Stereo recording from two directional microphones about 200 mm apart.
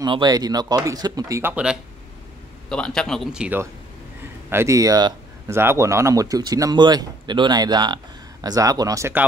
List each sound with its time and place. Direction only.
0.0 s speech: 20° right (ahead or behind)